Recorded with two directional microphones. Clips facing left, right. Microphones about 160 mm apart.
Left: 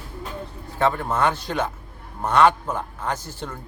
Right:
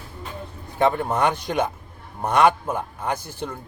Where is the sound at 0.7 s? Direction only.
15° right (ahead or behind).